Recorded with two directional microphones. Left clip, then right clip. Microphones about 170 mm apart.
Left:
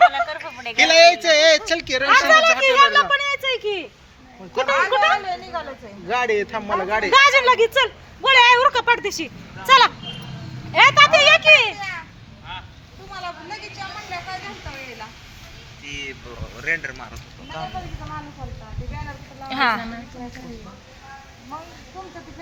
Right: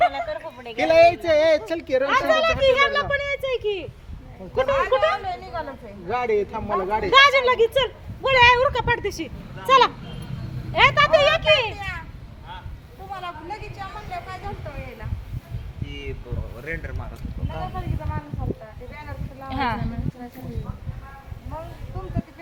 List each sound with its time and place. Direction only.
0.0 s a sound: 5° left (ahead or behind)
0.8 s a woman's voice: 50° right (ahead or behind)
2.0 s speech: 20° left (ahead or behind)
6.1 s speech: 5° right (ahead or behind)
7.1 s speech: 25° left (ahead or behind)
16.6 s speech: 10° right (ahead or behind)
19.5 s speech: 10° left (ahead or behind)